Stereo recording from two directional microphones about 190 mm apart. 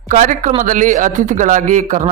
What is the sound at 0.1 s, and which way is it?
A man's voice, 40° right (ahead or behind).